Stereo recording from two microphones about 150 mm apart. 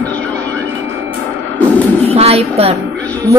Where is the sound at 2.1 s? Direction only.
40° right (ahead or behind).